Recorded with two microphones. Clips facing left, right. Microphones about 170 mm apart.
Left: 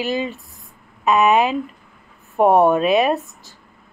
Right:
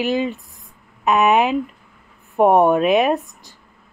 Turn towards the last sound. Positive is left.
turn(degrees=-15)  # may be behind; listen again after turning